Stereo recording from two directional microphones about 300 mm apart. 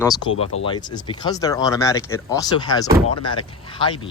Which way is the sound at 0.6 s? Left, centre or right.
Centre.